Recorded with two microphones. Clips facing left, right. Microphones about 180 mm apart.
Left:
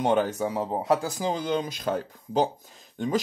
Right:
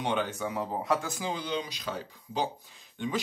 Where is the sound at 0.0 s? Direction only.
40° left (ahead or behind).